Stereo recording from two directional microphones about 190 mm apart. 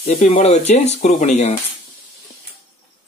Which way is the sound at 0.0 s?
35° left (ahead or behind).